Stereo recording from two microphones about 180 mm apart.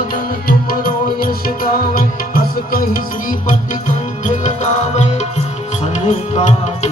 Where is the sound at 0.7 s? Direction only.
55° left (ahead or behind).